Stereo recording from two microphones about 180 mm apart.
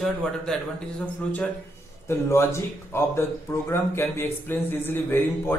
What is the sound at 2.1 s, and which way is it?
A man's voice, 15° left (ahead or behind).